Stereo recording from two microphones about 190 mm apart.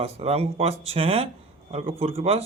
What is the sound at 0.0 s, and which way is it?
Speech, 35° right (ahead or behind).